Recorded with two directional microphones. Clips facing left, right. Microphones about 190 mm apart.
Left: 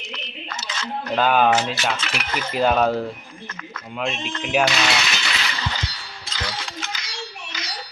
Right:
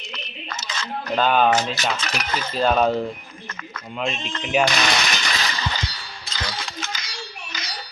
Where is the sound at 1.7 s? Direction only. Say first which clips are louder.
Even; 40° right (ahead or behind).